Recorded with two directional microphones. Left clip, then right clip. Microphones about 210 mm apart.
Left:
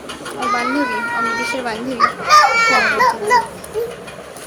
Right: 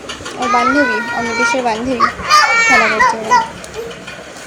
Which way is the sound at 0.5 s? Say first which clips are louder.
Right 8 dB; 20° right (ahead or behind).